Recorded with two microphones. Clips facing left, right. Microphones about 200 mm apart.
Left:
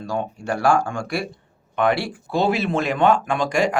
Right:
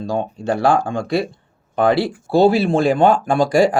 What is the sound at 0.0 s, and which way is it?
Speech, 25° right (ahead or behind).